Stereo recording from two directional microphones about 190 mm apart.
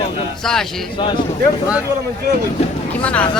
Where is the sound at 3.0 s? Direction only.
5° left (ahead or behind).